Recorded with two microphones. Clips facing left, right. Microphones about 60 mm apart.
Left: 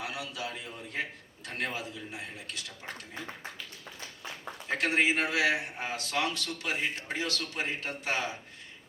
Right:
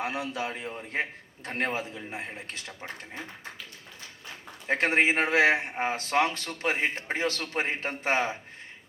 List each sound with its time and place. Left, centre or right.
0.0 s a man's voice: right
4.7 s a man's voice: right